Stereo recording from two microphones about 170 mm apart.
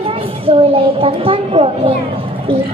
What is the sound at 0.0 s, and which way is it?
A woman's voice, 30° right (ahead or behind).